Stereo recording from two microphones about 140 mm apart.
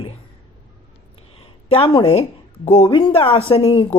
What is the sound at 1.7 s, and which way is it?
Speech, 40° left (ahead or behind).